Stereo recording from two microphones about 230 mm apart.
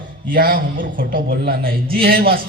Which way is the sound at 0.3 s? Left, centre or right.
Right.